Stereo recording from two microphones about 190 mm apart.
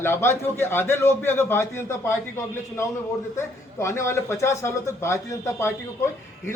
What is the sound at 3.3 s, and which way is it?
A man's voice, 15° left (ahead or behind).